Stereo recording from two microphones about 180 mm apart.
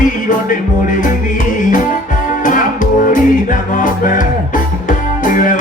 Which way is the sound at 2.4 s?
45° left (ahead or behind).